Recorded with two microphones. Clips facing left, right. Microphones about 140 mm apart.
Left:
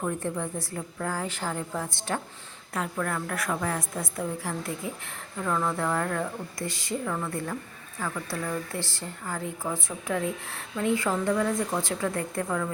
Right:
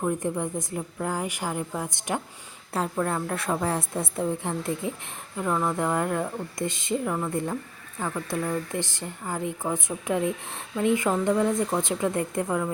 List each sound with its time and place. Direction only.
0.0 s a woman's voice: 15° right (ahead or behind)
2.7 s a woman's voice: 30° right (ahead or behind)